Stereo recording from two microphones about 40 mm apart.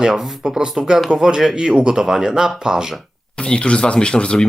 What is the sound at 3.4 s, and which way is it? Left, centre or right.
Speech, left.